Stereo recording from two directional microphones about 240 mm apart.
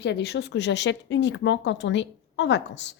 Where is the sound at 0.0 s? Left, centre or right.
Left.